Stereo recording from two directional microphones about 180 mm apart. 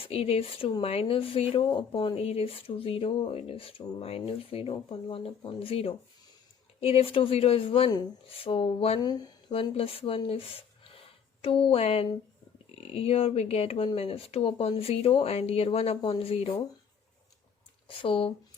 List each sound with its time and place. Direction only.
0.0 s speech: 35° left (ahead or behind)
17.8 s speech: 30° left (ahead or behind)